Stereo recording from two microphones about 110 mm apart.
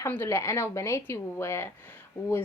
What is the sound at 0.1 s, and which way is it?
A woman's voice, 25° left (ahead or behind).